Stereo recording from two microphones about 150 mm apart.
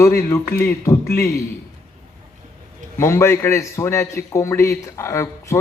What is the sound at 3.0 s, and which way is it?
A man's voice, 20° left (ahead or behind).